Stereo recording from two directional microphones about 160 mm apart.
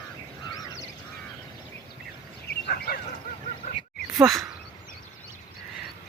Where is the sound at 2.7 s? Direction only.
70° left (ahead or behind).